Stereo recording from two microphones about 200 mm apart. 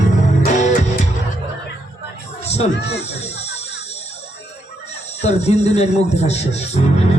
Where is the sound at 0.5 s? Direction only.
35° left (ahead or behind).